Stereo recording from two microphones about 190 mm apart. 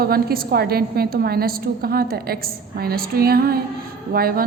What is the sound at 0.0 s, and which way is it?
A woman's voice, 50° right (ahead or behind).